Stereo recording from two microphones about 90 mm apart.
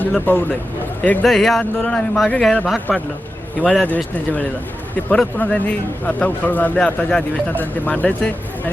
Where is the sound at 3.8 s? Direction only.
15° left (ahead or behind).